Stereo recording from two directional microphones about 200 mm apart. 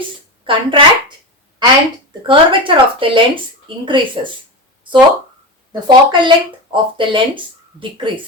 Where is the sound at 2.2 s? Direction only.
25° right (ahead or behind).